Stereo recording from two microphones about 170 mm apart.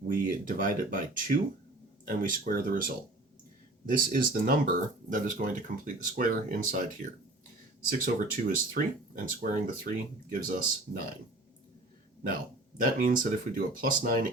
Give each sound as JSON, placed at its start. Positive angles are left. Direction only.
{"t": 0.1, "sound": "speech", "side_deg": -55}
{"t": 12.8, "sound": "speech", "side_deg": -50}